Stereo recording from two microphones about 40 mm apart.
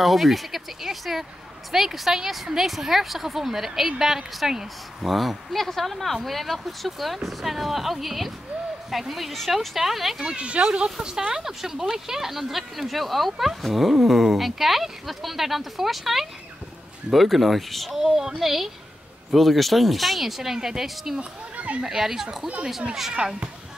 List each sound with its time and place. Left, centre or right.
0.0 s speech: centre
10.2 s speech: right; by 17.9 s centre
17.9 s speech: centre
21.2 s speech: right
21.8 s speech: centre
23.1 s speech: right